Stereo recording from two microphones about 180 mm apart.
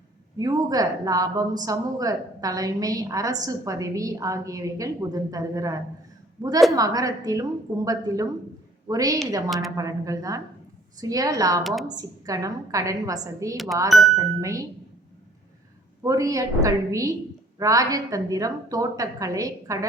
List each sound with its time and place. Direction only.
0.3 s a woman's voice: 20° right (ahead or behind)
9.5 s a woman's voice: centre (ahead or behind)
9.7 s a woman's voice: 20° right (ahead or behind)
11.6 s a woman's voice: centre (ahead or behind)
11.9 s a woman's voice: 20° right (ahead or behind)
16.0 s a woman's voice: 20° right (ahead or behind)